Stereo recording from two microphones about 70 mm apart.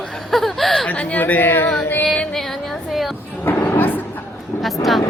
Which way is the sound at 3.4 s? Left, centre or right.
Left.